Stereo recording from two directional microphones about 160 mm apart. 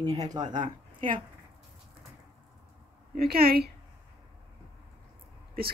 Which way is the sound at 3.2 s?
70° right (ahead or behind).